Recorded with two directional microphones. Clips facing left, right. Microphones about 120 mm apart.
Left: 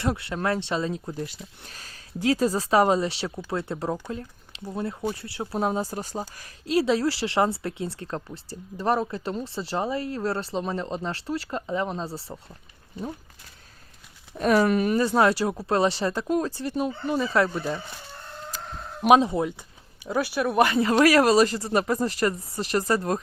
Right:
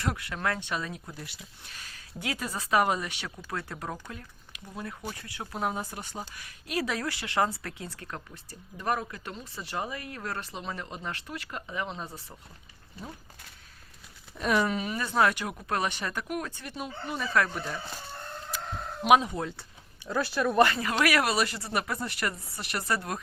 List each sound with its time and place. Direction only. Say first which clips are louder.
0.0 s speech: left 5 dB; 25° left (ahead or behind)
4.1 s a sound: left 10 dB; 30° left (ahead or behind)
4.7 s speech: left 9 dB; 30° left (ahead or behind)
14.3 s speech: left 6 dB; 40° left (ahead or behind)
14.7 s speech: left 9 dB; 60° left (ahead or behind)
14.9 s speech: left 2 dB; 30° left (ahead or behind)
17.2 s speech: left 4 dB; 25° left (ahead or behind)
19.0 s speech: left 4 dB; 30° left (ahead or behind)
19.4 s speech: left 7 dB; 15° left (ahead or behind)
20.9 s speech: left 8 dB; 35° left (ahead or behind)